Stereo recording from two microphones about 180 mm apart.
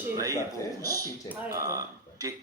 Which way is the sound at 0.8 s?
20° right (ahead or behind).